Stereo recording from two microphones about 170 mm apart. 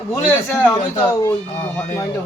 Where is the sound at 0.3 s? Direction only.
15° left (ahead or behind).